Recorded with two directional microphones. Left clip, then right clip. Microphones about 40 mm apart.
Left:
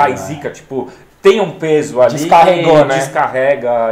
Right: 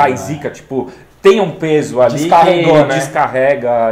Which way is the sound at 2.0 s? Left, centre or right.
Centre.